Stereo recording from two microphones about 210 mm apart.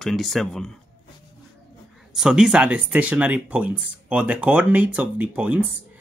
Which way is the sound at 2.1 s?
5° right (ahead or behind).